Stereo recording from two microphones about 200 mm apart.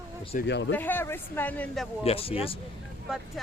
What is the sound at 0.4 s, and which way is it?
Speech, 60° left (ahead or behind).